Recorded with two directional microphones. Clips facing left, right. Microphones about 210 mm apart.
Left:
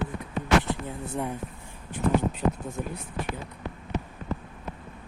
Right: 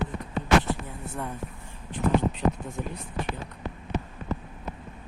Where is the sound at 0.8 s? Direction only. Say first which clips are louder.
Left 4 dB; 15° left (ahead or behind).